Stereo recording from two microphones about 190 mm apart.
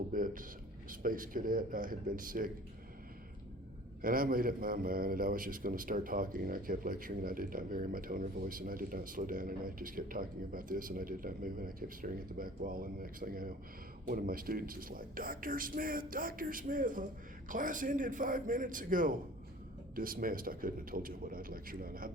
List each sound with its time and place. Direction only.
0.1 s a man's voice: 45° right (ahead or behind)
4.0 s a man's voice: 50° right (ahead or behind)